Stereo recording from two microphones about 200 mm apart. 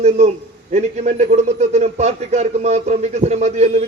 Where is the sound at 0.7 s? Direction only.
35° right (ahead or behind).